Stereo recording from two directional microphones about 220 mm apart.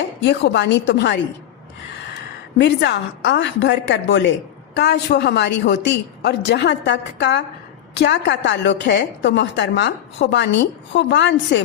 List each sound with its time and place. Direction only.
0.2 s a woman's voice: 50° left (ahead or behind)
2.6 s a woman's voice: 50° left (ahead or behind)